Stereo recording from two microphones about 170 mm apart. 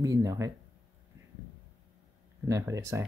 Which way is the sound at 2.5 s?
20° right (ahead or behind).